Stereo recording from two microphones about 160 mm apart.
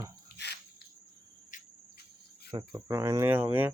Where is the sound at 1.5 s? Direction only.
55° left (ahead or behind).